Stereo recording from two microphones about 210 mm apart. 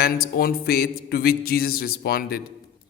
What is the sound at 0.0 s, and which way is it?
A man's voice, 45° left (ahead or behind).